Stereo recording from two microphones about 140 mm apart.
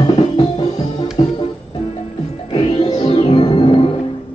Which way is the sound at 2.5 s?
35° left (ahead or behind).